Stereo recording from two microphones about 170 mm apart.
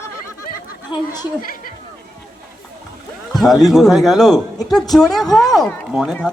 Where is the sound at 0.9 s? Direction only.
25° left (ahead or behind).